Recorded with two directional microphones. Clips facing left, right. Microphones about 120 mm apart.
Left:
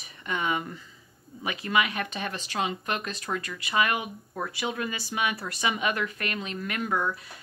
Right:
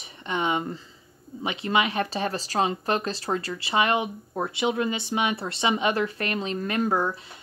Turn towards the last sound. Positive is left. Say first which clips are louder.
# right 4 dB
turn(degrees=-30)  # may be behind; listen again after turning